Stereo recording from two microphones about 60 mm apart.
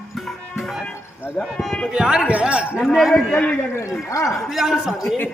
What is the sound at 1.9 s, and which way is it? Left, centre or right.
Speech, centre.